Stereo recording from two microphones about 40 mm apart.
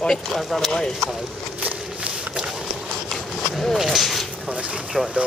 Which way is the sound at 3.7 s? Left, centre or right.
Centre.